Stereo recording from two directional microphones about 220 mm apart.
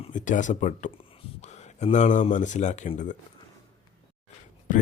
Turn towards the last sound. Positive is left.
turn(degrees=35)  # may be behind; listen again after turning